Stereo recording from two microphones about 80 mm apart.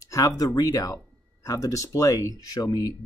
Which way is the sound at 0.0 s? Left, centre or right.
Left.